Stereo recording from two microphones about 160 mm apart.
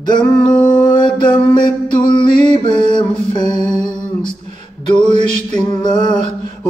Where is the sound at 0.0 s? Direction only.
30° left (ahead or behind).